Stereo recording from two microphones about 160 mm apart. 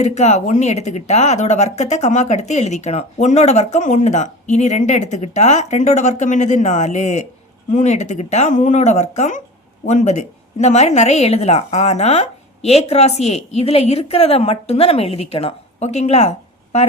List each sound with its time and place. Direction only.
0.0 s speech: 45° left (ahead or behind)